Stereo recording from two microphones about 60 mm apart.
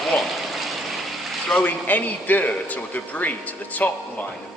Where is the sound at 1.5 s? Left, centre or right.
Left.